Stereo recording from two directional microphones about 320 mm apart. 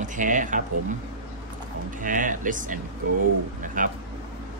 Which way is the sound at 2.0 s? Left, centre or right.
Right.